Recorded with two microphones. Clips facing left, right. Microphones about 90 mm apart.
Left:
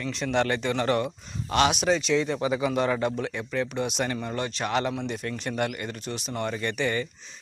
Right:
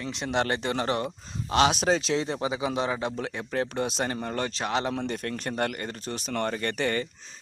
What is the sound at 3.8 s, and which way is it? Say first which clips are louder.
Speech: even; 35° right (ahead or behind).